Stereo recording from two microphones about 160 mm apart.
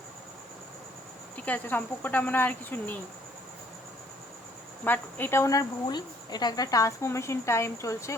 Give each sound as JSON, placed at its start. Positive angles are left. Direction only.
{"t": 1.5, "sound": "speech", "side_deg": 10}
{"t": 4.9, "sound": "speech", "side_deg": 10}